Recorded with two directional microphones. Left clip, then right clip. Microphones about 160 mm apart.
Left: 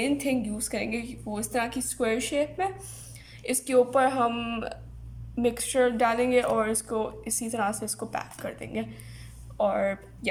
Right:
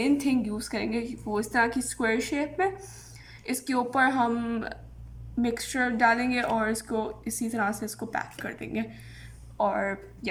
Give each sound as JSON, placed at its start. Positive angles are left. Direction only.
{"t": 0.0, "sound": "speech", "side_deg": 15}